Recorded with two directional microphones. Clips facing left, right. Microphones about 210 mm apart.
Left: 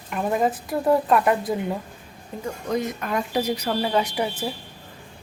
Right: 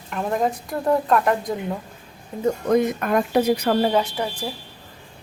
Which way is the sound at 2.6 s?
55° right (ahead or behind).